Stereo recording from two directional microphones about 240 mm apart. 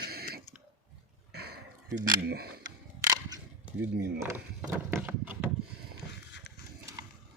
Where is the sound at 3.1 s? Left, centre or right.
Centre.